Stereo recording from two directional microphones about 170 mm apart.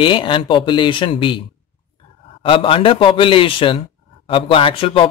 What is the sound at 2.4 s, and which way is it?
A man's voice, 30° left (ahead or behind).